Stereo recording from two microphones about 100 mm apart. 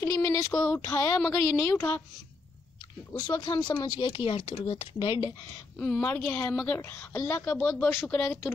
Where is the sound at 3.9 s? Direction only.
60° left (ahead or behind).